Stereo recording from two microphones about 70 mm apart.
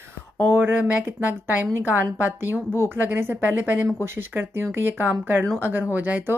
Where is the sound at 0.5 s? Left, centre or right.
Right.